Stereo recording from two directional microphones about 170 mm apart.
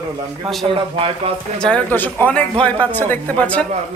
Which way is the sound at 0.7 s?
35° right (ahead or behind).